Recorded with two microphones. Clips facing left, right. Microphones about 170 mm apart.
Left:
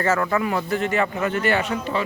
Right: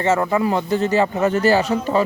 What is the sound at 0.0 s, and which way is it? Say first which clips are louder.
A man's voice: right 3 dB; 25° right (ahead or behind).